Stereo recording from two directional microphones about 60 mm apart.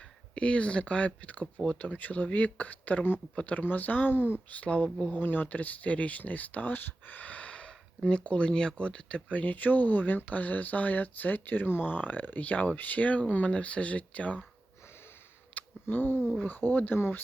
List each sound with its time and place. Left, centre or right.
0.3 s speech: centre; by 4.4 s left
4.5 s speech: left
15.5 s a sound: left
16.4 s speech: left